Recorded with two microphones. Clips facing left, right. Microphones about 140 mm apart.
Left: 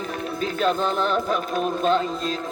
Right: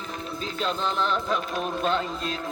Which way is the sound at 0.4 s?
50° left (ahead or behind).